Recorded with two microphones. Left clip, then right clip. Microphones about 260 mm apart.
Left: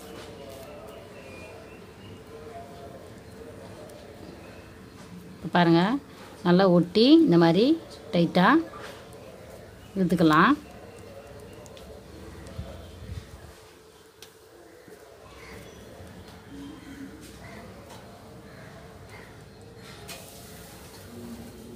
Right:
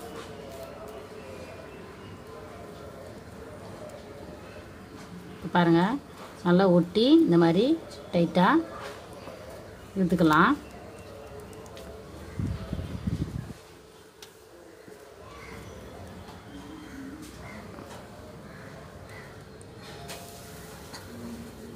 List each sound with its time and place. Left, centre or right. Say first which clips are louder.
5.5 s a woman's voice: left 1 dB; left
9.9 s a woman's voice: left 1 dB; left